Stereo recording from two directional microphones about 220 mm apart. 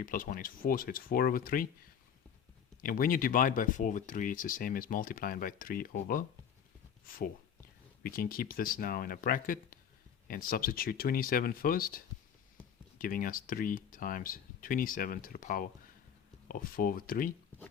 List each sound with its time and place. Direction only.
0.0 s speech: 40° left (ahead or behind)
2.8 s speech: 40° left (ahead or behind)
8.0 s speech: 40° left (ahead or behind)